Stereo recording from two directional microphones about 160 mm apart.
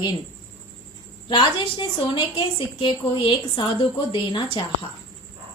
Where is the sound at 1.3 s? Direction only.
30° left (ahead or behind).